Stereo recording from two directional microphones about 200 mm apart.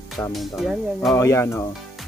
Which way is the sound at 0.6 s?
Centre (ahead or behind).